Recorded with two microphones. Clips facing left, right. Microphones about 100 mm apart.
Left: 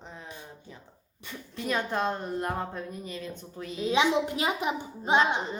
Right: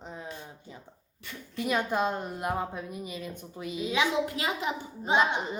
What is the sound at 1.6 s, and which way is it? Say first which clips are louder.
A woman's voice: right 1 dB; 10° right (ahead or behind).